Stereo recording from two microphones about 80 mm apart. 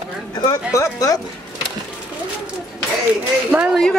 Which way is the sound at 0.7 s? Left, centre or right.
Left.